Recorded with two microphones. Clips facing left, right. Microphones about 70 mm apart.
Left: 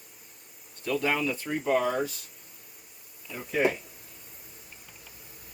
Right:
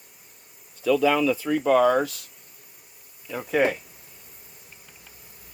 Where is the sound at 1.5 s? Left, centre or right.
Right.